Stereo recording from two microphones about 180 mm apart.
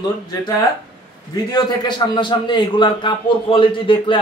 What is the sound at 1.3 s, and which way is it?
A man's voice, 25° left (ahead or behind).